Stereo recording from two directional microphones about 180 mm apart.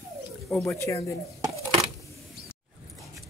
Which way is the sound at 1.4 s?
15° right (ahead or behind).